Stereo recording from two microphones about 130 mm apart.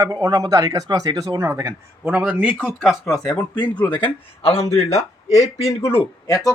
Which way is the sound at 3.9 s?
40° left (ahead or behind).